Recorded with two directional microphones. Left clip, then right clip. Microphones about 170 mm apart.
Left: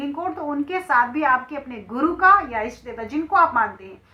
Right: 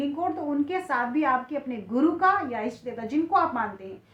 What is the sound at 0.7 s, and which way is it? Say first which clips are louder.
A woman's voice: left 7 dB; 35° right (ahead or behind).